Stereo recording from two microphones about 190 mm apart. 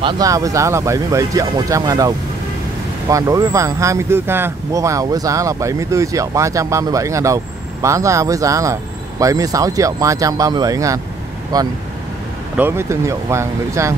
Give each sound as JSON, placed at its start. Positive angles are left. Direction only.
{"t": 0.0, "sound": "speech", "side_deg": -20}